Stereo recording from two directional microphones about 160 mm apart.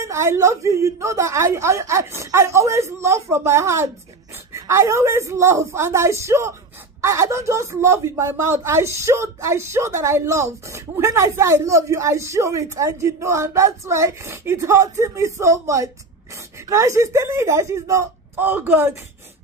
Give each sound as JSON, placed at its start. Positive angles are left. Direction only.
{"t": 0.0, "sound": "speech", "side_deg": -20}